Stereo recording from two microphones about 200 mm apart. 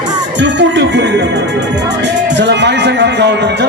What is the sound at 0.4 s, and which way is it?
Speech, 60° right (ahead or behind).